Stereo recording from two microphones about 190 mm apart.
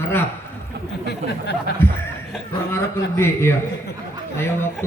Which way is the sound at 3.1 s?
15° left (ahead or behind).